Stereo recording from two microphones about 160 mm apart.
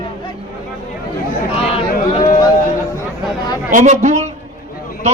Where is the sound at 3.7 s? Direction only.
50° right (ahead or behind).